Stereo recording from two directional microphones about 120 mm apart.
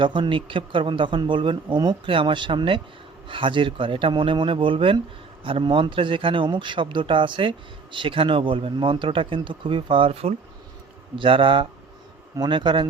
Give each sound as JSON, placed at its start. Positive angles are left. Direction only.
{"t": 0.0, "sound": "speech", "side_deg": -40}
{"t": 11.2, "sound": "speech", "side_deg": -45}